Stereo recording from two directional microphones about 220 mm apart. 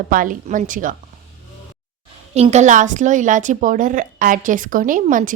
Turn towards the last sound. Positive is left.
turn(degrees=-35)  # may be behind; listen again after turning